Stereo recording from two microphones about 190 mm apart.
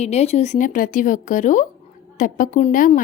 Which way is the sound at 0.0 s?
35° left (ahead or behind).